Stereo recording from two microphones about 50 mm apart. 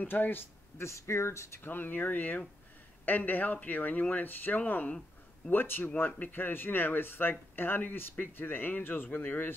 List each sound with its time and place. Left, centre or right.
0.1 s speech: left
0.8 s speech: left
1.6 s speech: left
5.5 s speech: left